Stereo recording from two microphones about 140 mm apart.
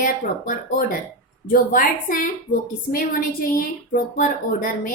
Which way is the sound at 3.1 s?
85° left.